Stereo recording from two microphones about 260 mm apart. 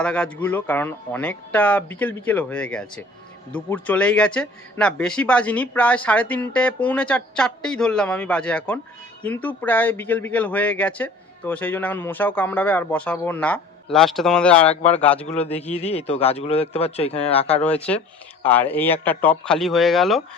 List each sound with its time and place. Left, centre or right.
0.0 s speech: centre
15.7 s speech: left
17.6 s speech: centre